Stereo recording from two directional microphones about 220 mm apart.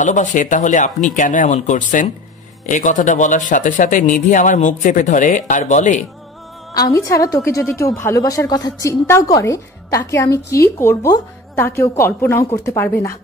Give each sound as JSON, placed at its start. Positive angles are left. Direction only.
{"t": 0.0, "sound": "speech", "side_deg": 35}
{"t": 6.9, "sound": "a woman's voice", "side_deg": 15}